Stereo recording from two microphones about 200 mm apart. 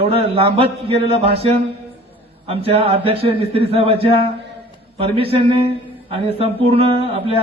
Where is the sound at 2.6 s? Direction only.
30° right (ahead or behind).